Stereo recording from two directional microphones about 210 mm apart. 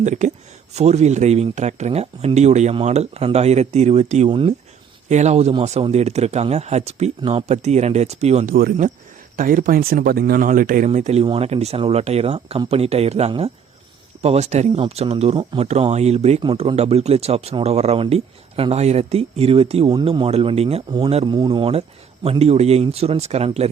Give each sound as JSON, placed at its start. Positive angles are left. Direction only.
{"t": 0.0, "sound": "speech", "side_deg": -35}
{"t": 8.5, "sound": "speech", "side_deg": -45}